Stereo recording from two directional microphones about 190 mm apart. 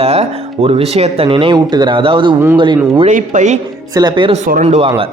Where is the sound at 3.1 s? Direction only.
40° right (ahead or behind).